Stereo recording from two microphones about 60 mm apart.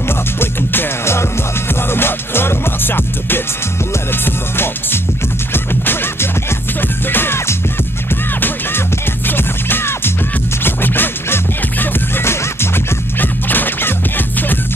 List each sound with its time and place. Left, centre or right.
0.4 s music: left
9.3 s music: left